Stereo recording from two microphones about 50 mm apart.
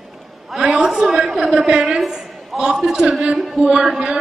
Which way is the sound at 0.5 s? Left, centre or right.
Centre.